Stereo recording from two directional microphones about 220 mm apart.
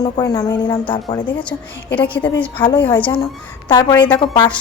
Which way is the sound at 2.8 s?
5° left (ahead or behind).